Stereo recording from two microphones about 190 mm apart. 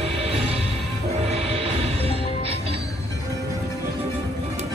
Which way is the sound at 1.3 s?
30° right (ahead or behind).